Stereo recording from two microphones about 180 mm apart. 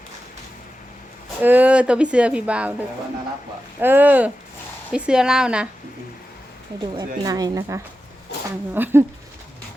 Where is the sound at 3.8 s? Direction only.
10° right (ahead or behind).